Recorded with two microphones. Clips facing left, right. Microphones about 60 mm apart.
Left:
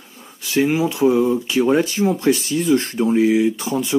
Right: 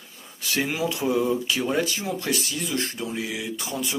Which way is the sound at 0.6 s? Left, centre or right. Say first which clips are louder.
Left 10 dB; left.